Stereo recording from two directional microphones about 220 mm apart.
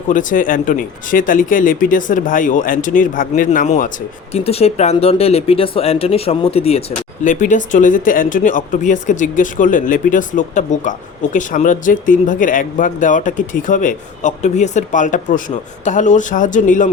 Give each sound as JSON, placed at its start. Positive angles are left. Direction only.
{"t": 0.1, "sound": "speech", "side_deg": 35}